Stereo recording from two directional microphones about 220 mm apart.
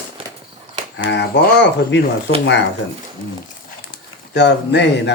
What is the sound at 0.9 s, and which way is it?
Speech, 50° left (ahead or behind).